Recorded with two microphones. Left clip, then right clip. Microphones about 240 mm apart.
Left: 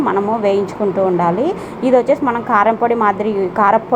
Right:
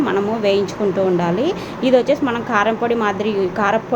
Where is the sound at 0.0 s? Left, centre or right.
Centre.